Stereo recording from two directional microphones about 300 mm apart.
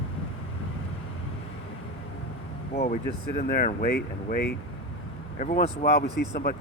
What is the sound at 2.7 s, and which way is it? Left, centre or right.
Speech, left.